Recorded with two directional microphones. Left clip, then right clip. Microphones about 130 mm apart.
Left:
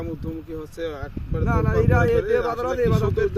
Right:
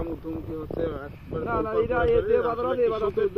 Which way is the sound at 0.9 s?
30° left (ahead or behind).